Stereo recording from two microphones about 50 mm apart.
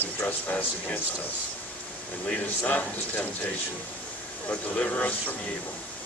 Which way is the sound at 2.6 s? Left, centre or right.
Left.